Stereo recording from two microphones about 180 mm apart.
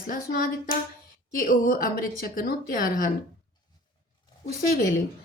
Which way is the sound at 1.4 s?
50° left (ahead or behind).